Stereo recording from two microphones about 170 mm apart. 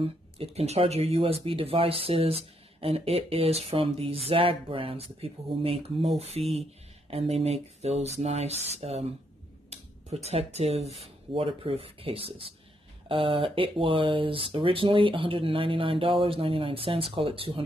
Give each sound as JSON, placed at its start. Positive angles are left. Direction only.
{"t": 0.4, "sound": "speech", "side_deg": -35}